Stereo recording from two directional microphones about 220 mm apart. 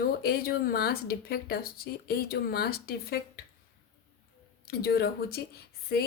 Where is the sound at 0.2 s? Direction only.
45° left (ahead or behind).